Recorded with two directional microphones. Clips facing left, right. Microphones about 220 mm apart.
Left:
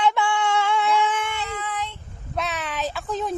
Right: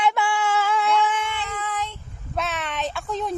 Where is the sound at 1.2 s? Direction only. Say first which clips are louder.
Even; 55° left (ahead or behind).